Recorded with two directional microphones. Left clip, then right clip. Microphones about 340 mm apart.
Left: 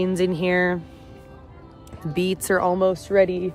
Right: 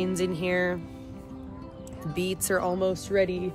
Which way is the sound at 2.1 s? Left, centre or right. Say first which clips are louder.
Left 6 dB; left.